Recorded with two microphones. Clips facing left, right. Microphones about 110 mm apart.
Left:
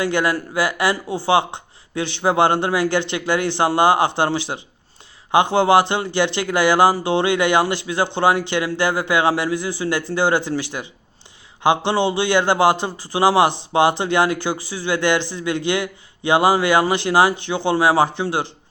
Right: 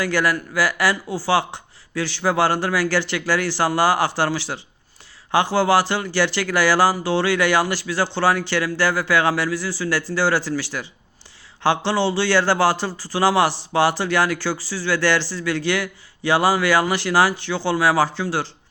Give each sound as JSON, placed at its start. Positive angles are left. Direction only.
{"t": 0.0, "sound": "speech", "side_deg": 20}